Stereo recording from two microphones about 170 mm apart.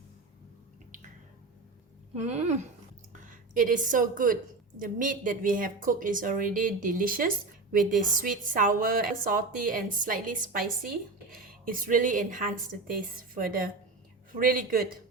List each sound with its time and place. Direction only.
2.1 s a woman's voice: 40° right (ahead or behind); by 14.8 s 55° right (ahead or behind)